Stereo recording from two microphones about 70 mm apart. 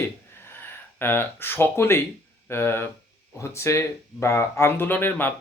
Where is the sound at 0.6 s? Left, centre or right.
Left.